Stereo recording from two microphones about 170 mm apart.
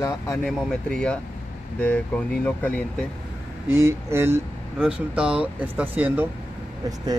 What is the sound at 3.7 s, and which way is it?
Speech, 15° right (ahead or behind).